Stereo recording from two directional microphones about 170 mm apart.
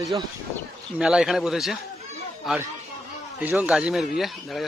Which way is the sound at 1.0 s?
5° right (ahead or behind).